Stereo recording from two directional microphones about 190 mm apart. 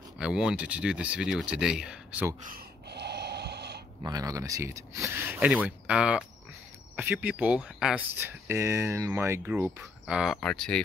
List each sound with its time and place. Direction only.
0.2 s speech: 5° right (ahead or behind)
2.4 s gasp: 55° right (ahead or behind)
4.0 s speech: 20° right (ahead or behind); by 10.8 s 5° left (ahead or behind)